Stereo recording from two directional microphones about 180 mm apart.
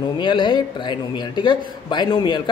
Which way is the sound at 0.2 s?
25° left (ahead or behind).